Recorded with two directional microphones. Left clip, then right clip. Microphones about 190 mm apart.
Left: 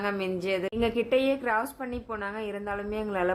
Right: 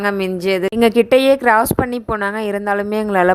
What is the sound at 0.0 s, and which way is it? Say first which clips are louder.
A woman's voice: right 11 dB; 45° right (ahead or behind).